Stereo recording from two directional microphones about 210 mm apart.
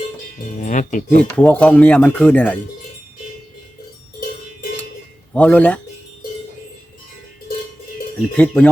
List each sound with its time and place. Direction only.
0.6 s speech: 35° left (ahead or behind)
1.4 s speech: 5° left (ahead or behind)
5.3 s speech: 5° left (ahead or behind)
8.4 s speech: 5° left (ahead or behind)